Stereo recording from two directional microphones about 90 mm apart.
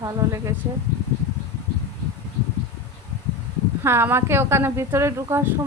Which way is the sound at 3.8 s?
25° right (ahead or behind).